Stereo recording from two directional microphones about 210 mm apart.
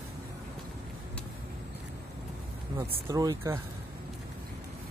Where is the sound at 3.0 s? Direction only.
15° right (ahead or behind).